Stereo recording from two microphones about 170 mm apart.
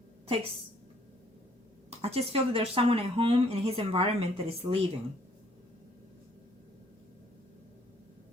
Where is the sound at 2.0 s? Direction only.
35° right (ahead or behind).